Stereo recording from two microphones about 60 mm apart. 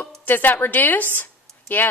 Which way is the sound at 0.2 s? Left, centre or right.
Left.